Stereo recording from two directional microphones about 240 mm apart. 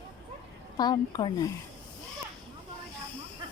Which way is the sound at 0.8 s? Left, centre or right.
Centre.